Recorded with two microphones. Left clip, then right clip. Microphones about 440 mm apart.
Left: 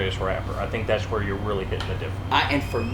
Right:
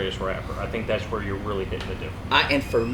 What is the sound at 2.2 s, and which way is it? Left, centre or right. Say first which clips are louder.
Speech: right 1 dB; right.